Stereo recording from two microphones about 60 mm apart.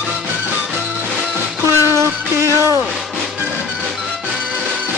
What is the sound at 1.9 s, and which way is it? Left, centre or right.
Music, right.